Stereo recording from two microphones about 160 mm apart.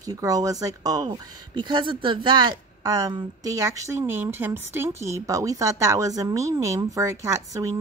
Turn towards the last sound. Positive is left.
turn(degrees=-20)  # may be behind; listen again after turning